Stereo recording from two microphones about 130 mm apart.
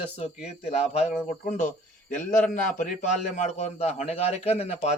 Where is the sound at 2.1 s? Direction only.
85° left.